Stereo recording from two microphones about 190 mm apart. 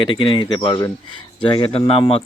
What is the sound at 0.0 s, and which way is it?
Speech, 25° left (ahead or behind).